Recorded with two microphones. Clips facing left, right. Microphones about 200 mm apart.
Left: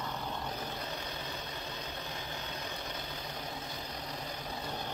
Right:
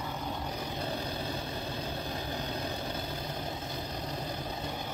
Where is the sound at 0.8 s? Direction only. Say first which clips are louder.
Right 6 dB; 30° right (ahead or behind).